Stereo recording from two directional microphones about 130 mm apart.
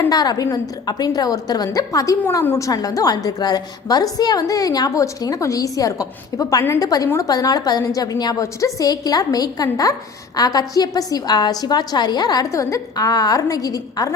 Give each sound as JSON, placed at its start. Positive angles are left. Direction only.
{"t": 0.1, "sound": "a woman's voice", "side_deg": 30}